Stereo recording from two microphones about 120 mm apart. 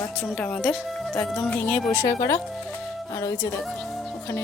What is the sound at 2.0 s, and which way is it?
Speech, 30° left (ahead or behind).